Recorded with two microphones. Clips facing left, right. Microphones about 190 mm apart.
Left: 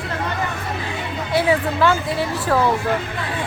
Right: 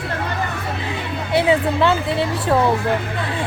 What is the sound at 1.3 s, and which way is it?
A woman's voice, 25° right (ahead or behind).